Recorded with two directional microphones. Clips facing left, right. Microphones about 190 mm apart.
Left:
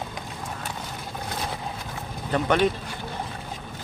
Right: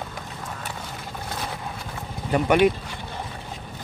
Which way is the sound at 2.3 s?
10° right (ahead or behind).